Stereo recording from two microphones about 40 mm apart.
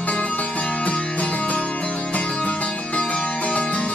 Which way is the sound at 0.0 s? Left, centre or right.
Left.